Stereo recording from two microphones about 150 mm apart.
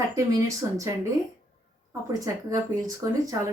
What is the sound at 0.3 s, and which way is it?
Speech, 20° right (ahead or behind).